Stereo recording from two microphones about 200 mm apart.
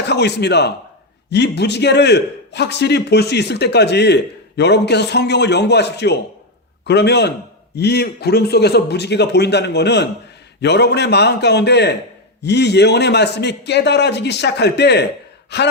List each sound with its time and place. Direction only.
0.1 s a man's voice: 55° left (ahead or behind)